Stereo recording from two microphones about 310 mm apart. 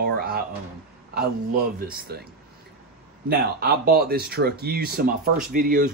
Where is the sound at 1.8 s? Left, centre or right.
Right.